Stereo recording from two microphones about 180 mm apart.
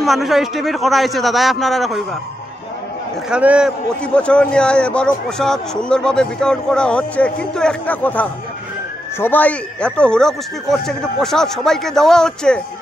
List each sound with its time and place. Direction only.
0.0 s a man's voice: centre (ahead or behind)
3.3 s a man's voice: 5° right (ahead or behind)
4.0 s a man's voice: 5° left (ahead or behind)